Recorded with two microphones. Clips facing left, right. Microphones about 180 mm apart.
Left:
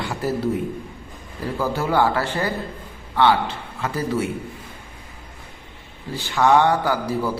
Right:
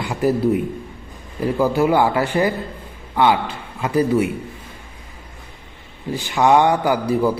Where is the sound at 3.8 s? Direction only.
15° right (ahead or behind).